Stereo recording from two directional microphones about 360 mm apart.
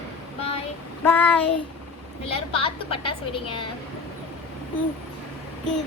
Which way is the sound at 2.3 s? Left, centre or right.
Centre.